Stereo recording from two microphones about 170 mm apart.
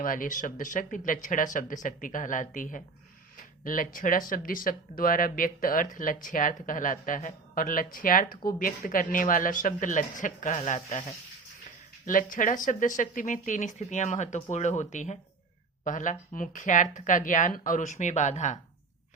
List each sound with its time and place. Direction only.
0.0 s speech: 50° left (ahead or behind)
12.0 s speech: 50° left (ahead or behind)